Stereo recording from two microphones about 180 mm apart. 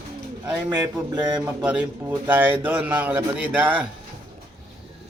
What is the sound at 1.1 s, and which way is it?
Speech, 25° right (ahead or behind).